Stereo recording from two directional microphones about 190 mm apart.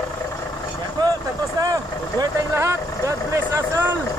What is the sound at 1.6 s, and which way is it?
Speech, 20° right (ahead or behind).